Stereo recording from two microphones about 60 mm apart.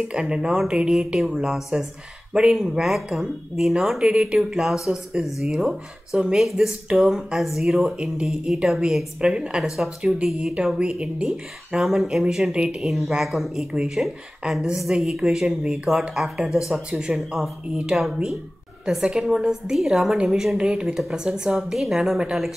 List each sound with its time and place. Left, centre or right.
0.1 s a woman's voice: centre
4.1 s a woman's voice: centre
4.4 s a woman's voice: centre
7.9 s a woman's voice: centre
12.8 s a woman's voice: centre
20.5 s a woman's voice: centre